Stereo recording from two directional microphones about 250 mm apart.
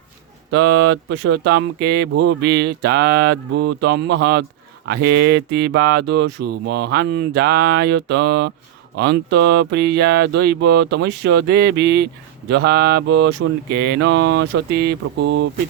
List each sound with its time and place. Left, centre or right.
0.5 s speech: right
5.0 s mantra: right
5.3 s speech: right
13.7 s mantra: right
14.0 s speech: right